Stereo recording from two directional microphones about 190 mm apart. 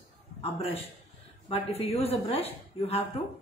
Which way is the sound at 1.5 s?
30° left (ahead or behind).